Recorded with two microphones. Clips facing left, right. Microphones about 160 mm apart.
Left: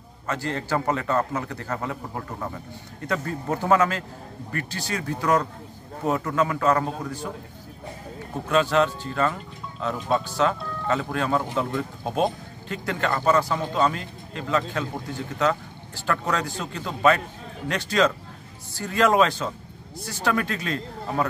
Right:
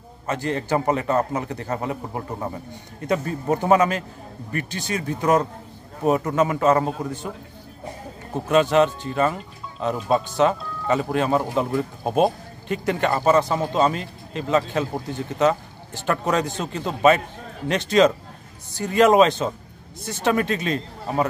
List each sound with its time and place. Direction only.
0.3 s speech: 20° right (ahead or behind)
8.5 s speech: 20° right (ahead or behind)